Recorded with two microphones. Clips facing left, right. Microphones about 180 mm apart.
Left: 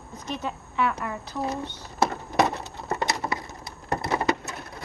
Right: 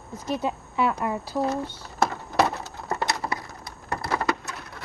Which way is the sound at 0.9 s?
30° right (ahead or behind).